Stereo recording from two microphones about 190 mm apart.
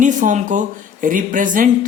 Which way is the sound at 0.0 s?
40° right (ahead or behind).